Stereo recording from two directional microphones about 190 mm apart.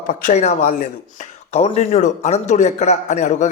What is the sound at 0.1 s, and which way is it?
A man's voice, 40° left (ahead or behind).